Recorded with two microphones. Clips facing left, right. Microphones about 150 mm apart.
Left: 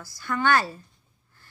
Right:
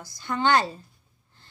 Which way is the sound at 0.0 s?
20° right (ahead or behind).